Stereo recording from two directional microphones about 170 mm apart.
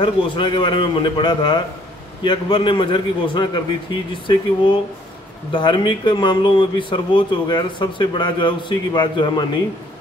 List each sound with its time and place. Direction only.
0.0 s speech: 30° left (ahead or behind)
5.5 s speech: 30° left (ahead or behind)